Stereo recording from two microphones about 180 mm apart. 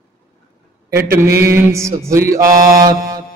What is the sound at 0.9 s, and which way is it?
Mantra, 60° right (ahead or behind).